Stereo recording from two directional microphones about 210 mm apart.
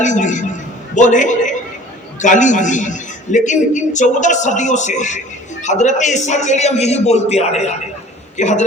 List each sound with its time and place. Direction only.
0.0 s a man's voice: 35° left (ahead or behind)